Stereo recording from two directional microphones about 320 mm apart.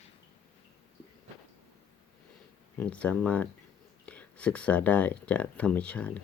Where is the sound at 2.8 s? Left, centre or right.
Centre.